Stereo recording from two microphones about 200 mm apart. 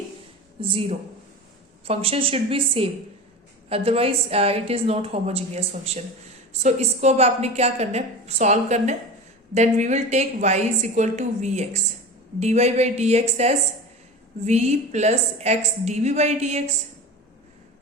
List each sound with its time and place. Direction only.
0.6 s a woman's voice: 25° right (ahead or behind)